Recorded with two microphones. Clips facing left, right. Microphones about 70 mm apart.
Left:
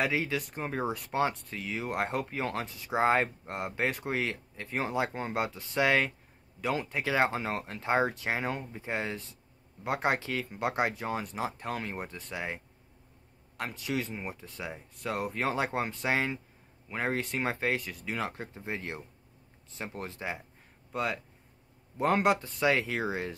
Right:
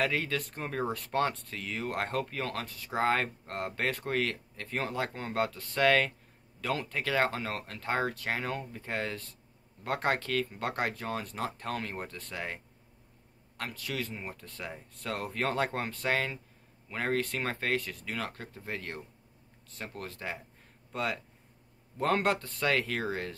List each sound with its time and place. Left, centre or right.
0.0 s speech: centre
13.6 s speech: centre
20.9 s speech: centre